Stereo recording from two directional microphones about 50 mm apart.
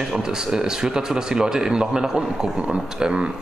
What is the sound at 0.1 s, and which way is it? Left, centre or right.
Speech, centre.